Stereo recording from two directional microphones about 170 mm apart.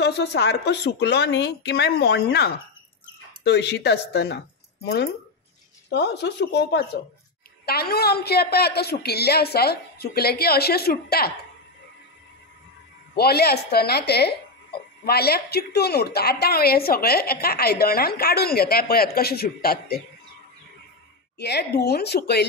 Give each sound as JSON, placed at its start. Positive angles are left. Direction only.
{"t": 0.0, "sound": "speech", "side_deg": 80}
{"t": 7.6, "sound": "speech", "side_deg": 65}
{"t": 13.1, "sound": "speech", "side_deg": 70}
{"t": 21.4, "sound": "speech", "side_deg": 75}